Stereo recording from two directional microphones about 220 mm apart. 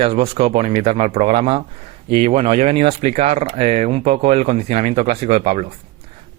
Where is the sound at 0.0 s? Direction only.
25° right (ahead or behind).